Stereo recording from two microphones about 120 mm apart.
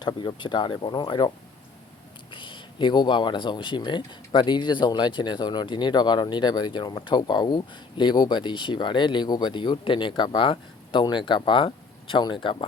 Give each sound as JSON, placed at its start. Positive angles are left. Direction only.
{"t": 0.0, "sound": "speech", "side_deg": 40}
{"t": 2.3, "sound": "speech", "side_deg": 45}